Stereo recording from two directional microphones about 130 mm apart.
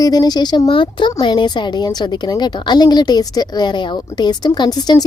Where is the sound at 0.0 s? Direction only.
30° left (ahead or behind).